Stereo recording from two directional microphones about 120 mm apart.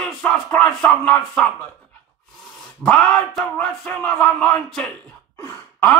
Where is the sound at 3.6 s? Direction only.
15° left (ahead or behind).